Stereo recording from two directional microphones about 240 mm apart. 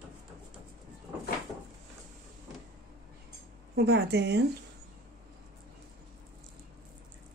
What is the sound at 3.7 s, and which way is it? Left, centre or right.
Speech, right.